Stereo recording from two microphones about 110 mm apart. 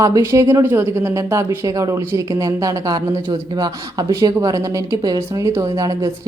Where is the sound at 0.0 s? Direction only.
30° right (ahead or behind).